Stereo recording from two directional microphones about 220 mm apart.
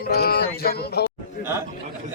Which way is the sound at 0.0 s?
45° left (ahead or behind).